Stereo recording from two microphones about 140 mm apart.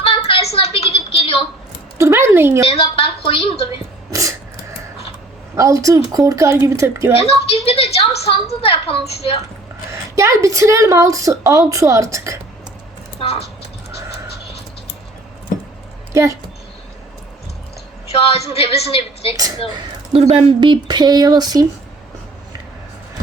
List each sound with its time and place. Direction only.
0.0 s a sound: 40° left (ahead or behind)
2.0 s a sound: 20° right (ahead or behind)
2.6 s a woman's voice: 40° left (ahead or behind)
4.1 s dog: 25° right (ahead or behind)
5.5 s a woman's voice: 20° right (ahead or behind)
7.2 s a woman's voice: 45° left (ahead or behind)
9.9 s a woman's voice: 20° right (ahead or behind)
13.1 s a woman's voice: 40° left (ahead or behind)
18.1 s a woman's voice: 45° left (ahead or behind)
20.1 s a woman's voice: 45° right (ahead or behind); by 21.7 s 30° right (ahead or behind)